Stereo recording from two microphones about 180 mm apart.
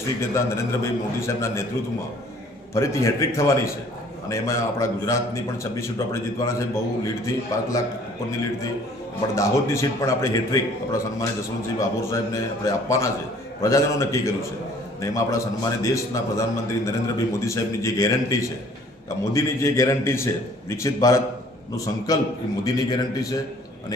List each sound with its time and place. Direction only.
0.2 s a man's voice: 15° left (ahead or behind)
2.7 s a man's voice: 15° left (ahead or behind)
6.4 s a man's voice: 15° left (ahead or behind)
9.3 s a man's voice: 15° left (ahead or behind)